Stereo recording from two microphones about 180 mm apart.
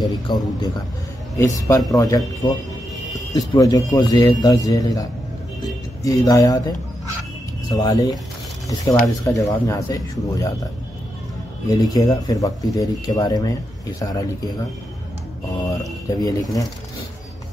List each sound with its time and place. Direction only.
0.0 s speech: 20° left (ahead or behind)
7.7 s speech: 20° left (ahead or behind)
11.7 s speech: 20° left (ahead or behind)
16.2 s speech: 20° left (ahead or behind)